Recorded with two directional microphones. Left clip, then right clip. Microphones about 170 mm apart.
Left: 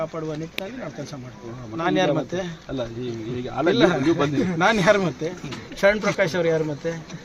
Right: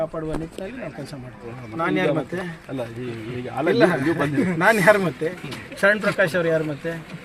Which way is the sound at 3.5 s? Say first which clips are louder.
Even; 10° right (ahead or behind).